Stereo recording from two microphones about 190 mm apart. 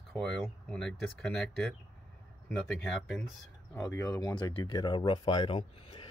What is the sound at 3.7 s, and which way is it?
Speech, 15° left (ahead or behind).